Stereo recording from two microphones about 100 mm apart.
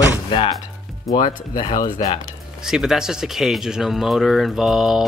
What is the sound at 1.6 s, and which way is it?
Speech, 45° left (ahead or behind).